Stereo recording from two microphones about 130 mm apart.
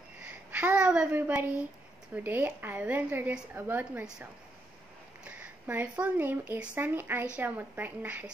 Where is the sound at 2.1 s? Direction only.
15° right (ahead or behind).